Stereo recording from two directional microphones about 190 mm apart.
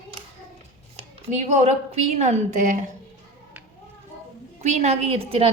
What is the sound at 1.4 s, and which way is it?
A woman's voice, 40° right (ahead or behind).